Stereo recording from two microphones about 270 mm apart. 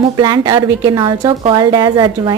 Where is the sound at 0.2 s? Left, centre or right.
Centre.